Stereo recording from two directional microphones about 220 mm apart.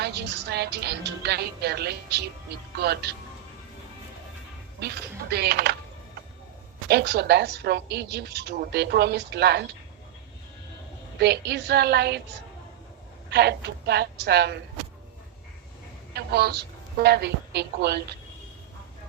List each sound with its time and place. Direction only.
0.0 s a woman's voice: 50° right (ahead or behind)
4.8 s a woman's voice: 50° right (ahead or behind)
6.8 s a woman's voice: 50° right (ahead or behind)
11.2 s a woman's voice: 50° right (ahead or behind)
13.3 s a woman's voice: 50° right (ahead or behind)
16.1 s a woman's voice: 45° right (ahead or behind)